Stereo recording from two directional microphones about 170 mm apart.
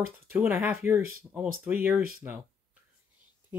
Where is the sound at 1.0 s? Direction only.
55° right (ahead or behind).